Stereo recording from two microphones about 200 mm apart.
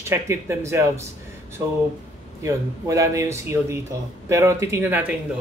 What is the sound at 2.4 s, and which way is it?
Speech, 15° right (ahead or behind).